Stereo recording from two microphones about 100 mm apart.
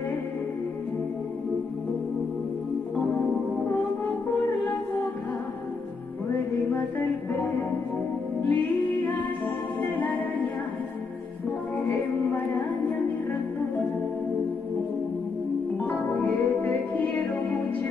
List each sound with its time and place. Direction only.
8.5 s music: 15° left (ahead or behind)
15.9 s music: 15° left (ahead or behind)